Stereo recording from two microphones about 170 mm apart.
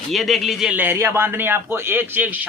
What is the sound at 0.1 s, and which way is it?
A man's voice, centre (ahead or behind).